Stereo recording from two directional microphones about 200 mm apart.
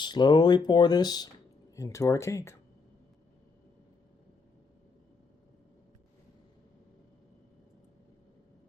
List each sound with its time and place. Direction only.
0.0 s speech: 20° left (ahead or behind)